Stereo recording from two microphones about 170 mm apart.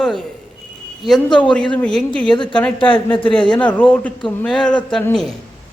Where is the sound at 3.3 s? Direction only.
5° left (ahead or behind).